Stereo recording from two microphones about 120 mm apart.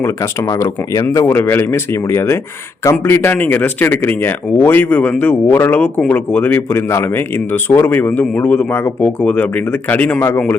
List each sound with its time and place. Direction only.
0.0 s speech: 25° left (ahead or behind)